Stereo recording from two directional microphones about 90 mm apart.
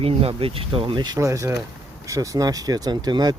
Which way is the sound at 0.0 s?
90° right.